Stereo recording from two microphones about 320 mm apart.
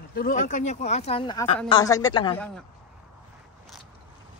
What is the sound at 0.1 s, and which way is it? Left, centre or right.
A woman's voice, left.